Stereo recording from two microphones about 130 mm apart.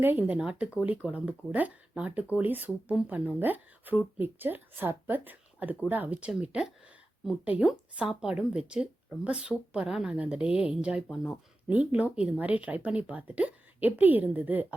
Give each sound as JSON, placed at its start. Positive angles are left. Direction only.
{"t": 0.0, "sound": "speech", "side_deg": -15}